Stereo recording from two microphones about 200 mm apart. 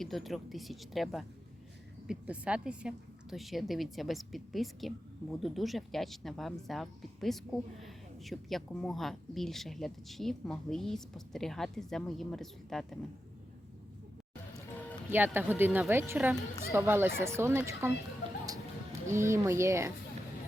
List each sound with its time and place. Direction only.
0.0 s a woman's voice: centre (ahead or behind)
15.1 s speech: 10° right (ahead or behind)
19.0 s speech: 15° right (ahead or behind)